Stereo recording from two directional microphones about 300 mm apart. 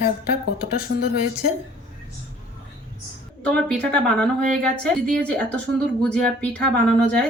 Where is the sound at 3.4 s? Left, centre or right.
Centre.